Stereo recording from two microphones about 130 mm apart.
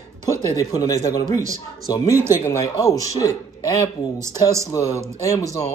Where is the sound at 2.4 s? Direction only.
25° left (ahead or behind).